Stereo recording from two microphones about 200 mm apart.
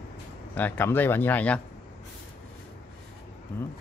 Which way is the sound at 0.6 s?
10° left (ahead or behind).